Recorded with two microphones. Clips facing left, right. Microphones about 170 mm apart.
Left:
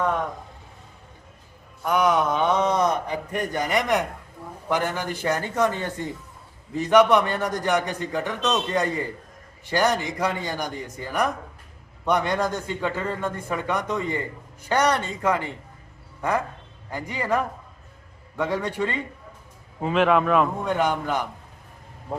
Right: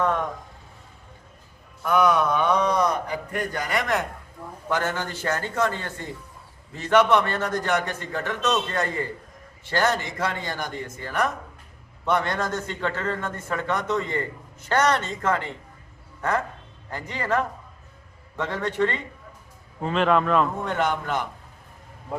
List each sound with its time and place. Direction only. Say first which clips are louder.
1.8 s a man's voice: right 1 dB; 20° left (ahead or behind)
16.9 s a man's voice: left 1 dB; 10° left (ahead or behind)